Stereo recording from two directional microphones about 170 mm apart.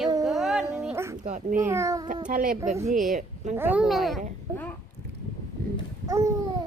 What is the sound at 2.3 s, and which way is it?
A woman's voice, 55° right (ahead or behind).